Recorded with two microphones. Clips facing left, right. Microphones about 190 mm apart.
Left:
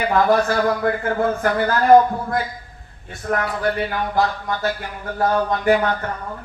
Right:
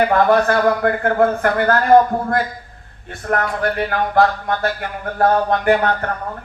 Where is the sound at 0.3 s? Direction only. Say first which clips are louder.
Right 3 dB; 60° right (ahead or behind).